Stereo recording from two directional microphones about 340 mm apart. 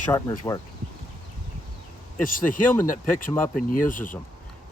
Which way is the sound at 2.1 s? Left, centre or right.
Left.